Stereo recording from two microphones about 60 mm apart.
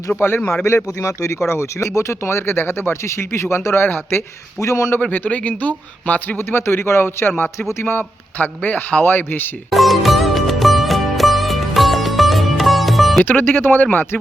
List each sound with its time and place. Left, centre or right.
0.2 s speech: left
0.9 s speech: left
4.6 s speech: left
5.1 s speech: left
6.4 s speech: left
9.6 s sitar: centre
13.2 s speech: left